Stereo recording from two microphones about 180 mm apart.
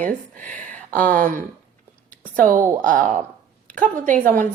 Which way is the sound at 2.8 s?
45° right (ahead or behind).